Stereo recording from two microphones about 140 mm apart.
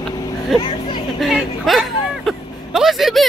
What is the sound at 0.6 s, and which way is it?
Speech, 30° left (ahead or behind).